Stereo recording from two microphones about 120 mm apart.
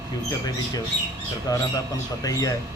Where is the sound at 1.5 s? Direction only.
30° left (ahead or behind).